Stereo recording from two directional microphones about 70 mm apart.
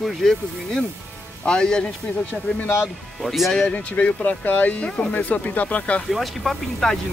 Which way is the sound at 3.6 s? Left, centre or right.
Centre.